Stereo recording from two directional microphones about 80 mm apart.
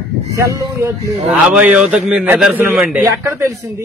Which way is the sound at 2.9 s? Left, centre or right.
Right.